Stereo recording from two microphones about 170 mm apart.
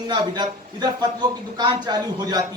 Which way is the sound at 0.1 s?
25° right (ahead or behind).